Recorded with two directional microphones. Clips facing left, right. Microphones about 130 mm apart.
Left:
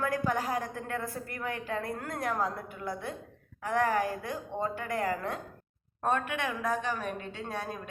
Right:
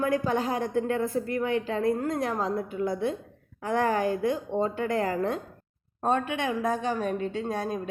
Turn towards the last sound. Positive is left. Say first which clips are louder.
# right 7 dB
turn(degrees=-40)  # may be behind; listen again after turning